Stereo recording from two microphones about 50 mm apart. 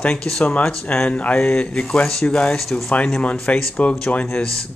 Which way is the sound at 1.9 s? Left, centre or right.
Centre.